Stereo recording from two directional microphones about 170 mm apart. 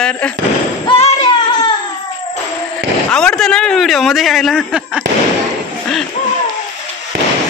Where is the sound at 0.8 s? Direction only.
30° left (ahead or behind).